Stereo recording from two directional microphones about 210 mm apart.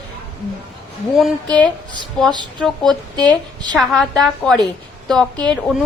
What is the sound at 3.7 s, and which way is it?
Speech, centre (ahead or behind).